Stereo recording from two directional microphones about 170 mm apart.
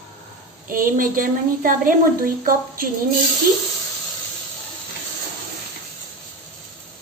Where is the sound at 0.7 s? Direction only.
55° right (ahead or behind).